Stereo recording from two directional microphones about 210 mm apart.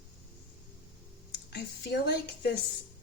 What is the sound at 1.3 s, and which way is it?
Speech, 55° left (ahead or behind).